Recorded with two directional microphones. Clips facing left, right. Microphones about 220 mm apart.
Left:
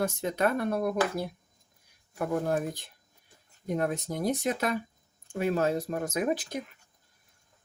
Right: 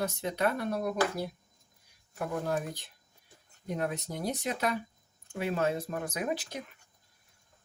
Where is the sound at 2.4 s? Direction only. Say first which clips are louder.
Left 3 dB; 50° left (ahead or behind).